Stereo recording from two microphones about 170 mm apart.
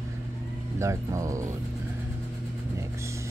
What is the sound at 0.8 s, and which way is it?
Speech, 15° right (ahead or behind).